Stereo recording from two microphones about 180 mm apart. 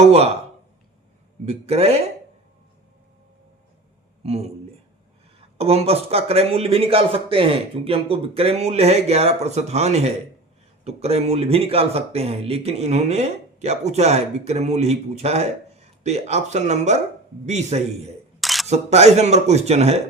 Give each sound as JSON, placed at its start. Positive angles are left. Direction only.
{"t": 1.5, "sound": "speech", "side_deg": -35}
{"t": 4.2, "sound": "speech", "side_deg": -35}
{"t": 18.3, "sound": "single-lens reflex camera", "side_deg": 0}
{"t": 18.7, "sound": "speech", "side_deg": -35}